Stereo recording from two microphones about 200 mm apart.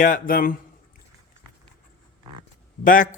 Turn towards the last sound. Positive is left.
turn(degrees=40)  # may be behind; listen again after turning